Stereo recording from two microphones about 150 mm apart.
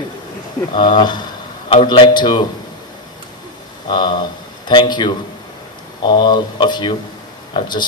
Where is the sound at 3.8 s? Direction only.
30° left (ahead or behind).